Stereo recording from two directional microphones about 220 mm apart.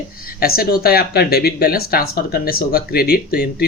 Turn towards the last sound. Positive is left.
turn(degrees=45)  # may be behind; listen again after turning